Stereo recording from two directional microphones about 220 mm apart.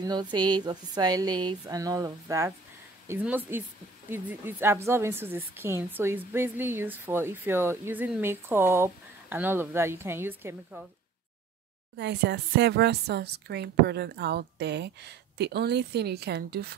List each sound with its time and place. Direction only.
0.0 s a woman's voice: 20° right (ahead or behind)
12.0 s speech: 50° right (ahead or behind)